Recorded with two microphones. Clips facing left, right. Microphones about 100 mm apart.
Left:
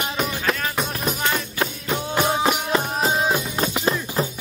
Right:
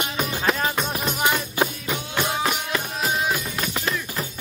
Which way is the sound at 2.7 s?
30° left (ahead or behind).